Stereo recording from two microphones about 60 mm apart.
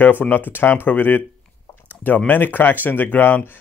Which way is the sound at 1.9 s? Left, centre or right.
Left.